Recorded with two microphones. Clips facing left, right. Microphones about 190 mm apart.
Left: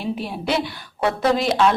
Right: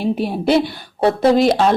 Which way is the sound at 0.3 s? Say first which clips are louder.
Right 9 dB; 35° right (ahead or behind).